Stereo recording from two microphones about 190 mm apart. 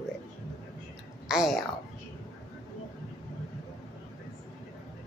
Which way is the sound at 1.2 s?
Centre (ahead or behind).